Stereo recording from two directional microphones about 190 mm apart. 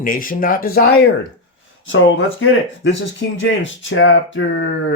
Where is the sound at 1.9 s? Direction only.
80° left.